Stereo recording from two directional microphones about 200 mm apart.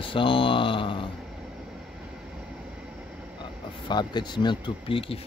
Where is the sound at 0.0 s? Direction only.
25° left (ahead or behind).